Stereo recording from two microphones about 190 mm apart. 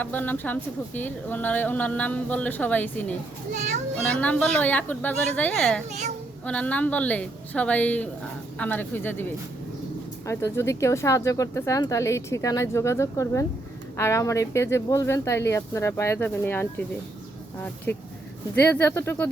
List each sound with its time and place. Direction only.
0.0 s a woman's voice: 10° left (ahead or behind)
3.5 s a child's voice: 40° right (ahead or behind)
4.1 s a woman's voice: 5° left (ahead or behind)
5.9 s a child's voice: 35° right (ahead or behind)
6.4 s a woman's voice: 5° left (ahead or behind)
10.2 s a woman's voice: 15° left (ahead or behind)
18.5 s a woman's voice: 10° left (ahead or behind)